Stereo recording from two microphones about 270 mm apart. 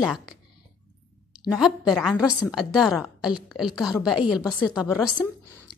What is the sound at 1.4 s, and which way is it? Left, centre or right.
A woman's voice, centre.